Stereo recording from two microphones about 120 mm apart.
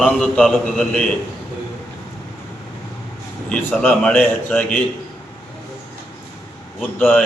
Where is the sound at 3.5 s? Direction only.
5° left (ahead or behind).